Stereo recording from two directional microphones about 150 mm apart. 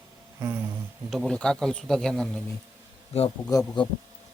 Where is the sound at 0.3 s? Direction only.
15° right (ahead or behind).